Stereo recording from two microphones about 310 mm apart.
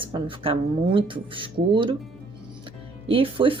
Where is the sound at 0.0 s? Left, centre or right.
Centre.